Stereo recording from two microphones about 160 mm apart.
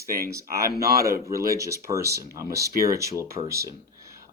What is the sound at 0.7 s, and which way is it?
Speech, 75° right (ahead or behind).